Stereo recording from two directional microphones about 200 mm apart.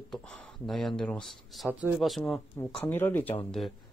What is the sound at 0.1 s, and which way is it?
Speech, 5° left (ahead or behind).